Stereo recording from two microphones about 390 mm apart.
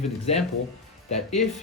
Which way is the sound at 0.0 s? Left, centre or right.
Centre.